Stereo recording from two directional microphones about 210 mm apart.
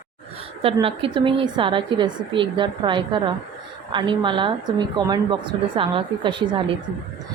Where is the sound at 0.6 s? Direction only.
25° right (ahead or behind).